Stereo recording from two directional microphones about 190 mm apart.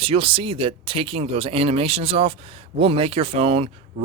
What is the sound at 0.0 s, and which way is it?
Speech, 30° right (ahead or behind).